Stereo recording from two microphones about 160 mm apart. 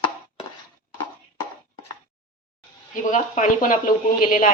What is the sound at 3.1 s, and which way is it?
A woman's voice, 55° left (ahead or behind).